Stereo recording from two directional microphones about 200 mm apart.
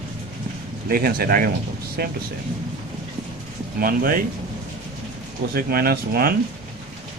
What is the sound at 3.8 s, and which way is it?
Speech, 45° right (ahead or behind).